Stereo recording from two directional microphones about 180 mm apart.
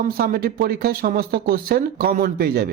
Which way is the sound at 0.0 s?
55° right (ahead or behind).